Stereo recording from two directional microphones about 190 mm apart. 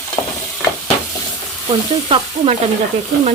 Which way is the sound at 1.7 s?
30° right (ahead or behind).